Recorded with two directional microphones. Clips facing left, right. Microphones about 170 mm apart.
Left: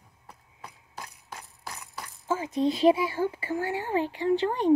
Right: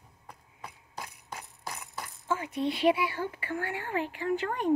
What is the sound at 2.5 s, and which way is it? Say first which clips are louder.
Speech: left 5 dB; 40° left (ahead or behind).